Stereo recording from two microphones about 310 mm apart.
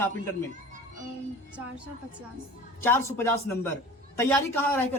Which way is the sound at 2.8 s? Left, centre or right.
Centre.